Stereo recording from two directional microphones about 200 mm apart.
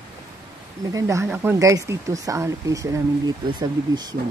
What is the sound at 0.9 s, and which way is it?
Speech, 15° right (ahead or behind).